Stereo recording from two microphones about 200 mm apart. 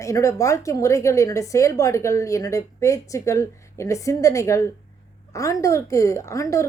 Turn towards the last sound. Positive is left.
turn(degrees=15)  # may be behind; listen again after turning